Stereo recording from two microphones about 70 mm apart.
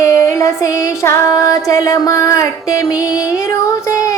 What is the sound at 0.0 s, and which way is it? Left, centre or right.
Music, left.